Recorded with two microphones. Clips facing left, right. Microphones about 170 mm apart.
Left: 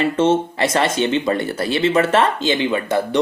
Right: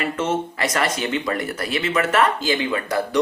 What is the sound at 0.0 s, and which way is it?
Speech, 30° left (ahead or behind).